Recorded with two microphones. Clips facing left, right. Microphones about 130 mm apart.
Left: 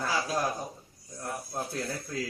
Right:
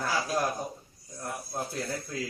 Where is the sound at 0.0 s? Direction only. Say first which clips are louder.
Even; 5° right (ahead or behind).